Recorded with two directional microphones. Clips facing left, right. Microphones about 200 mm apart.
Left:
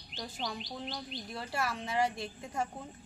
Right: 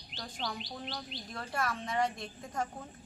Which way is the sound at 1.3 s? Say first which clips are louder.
Even; 5° left (ahead or behind).